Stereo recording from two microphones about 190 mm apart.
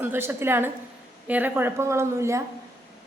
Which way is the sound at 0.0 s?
10° right (ahead or behind).